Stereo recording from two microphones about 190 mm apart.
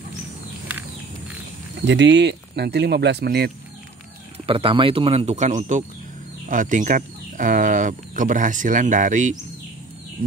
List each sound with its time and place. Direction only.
1.9 s speech: 65° right (ahead or behind)
4.5 s speech: 30° right (ahead or behind)